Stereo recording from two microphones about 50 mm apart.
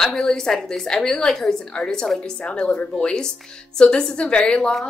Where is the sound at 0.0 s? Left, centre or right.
Centre; by 2.9 s left.